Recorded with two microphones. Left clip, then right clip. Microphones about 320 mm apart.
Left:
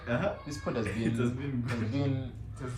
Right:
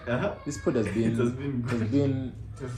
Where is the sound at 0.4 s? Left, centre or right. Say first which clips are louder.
Right 7 dB; left.